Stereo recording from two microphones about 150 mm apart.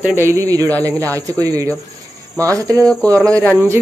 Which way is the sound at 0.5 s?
10° left (ahead or behind).